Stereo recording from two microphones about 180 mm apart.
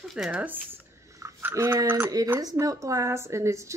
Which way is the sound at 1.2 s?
15° right (ahead or behind).